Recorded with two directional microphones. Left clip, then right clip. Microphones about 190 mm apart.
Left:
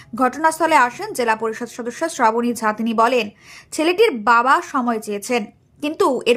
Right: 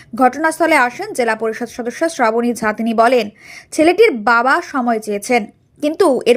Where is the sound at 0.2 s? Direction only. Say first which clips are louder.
Right 3 dB; 10° right (ahead or behind).